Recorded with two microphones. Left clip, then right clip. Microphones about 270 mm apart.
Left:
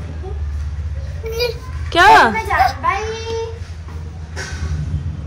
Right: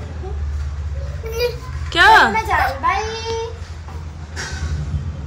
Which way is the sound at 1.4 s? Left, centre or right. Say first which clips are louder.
Right 1 dB; centre.